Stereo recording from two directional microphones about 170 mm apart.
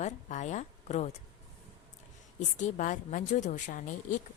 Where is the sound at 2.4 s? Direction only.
45° left (ahead or behind).